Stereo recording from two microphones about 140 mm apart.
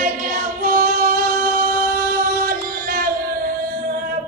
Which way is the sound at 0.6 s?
75° right (ahead or behind).